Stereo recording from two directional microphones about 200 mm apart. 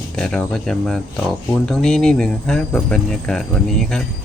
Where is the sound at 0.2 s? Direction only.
Centre (ahead or behind).